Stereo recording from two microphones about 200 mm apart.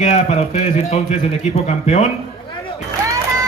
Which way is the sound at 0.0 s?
35° left (ahead or behind).